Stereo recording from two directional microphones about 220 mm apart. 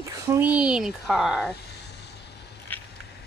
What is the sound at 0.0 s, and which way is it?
Speech, 10° right (ahead or behind).